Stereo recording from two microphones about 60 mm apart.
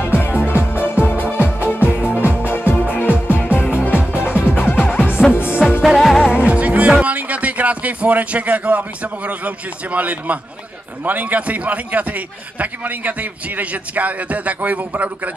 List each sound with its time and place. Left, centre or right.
0.0 s music: left
5.8 s music: centre
6.3 s music: centre
7.0 s speech: right
9.9 s a man's voice: right